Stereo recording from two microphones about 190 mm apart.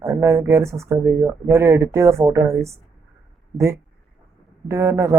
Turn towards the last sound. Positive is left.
turn(degrees=-15)  # may be behind; listen again after turning